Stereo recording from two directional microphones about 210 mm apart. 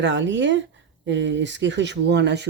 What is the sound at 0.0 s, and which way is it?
Speech, 60° right (ahead or behind).